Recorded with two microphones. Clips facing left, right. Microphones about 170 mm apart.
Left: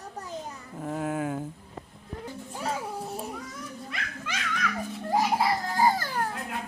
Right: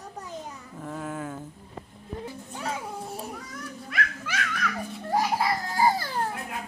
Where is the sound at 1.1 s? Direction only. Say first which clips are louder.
Left 5 dB; 10° left (ahead or behind).